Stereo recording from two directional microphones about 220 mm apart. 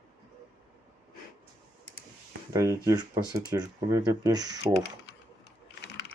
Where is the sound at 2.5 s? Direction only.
15° right (ahead or behind).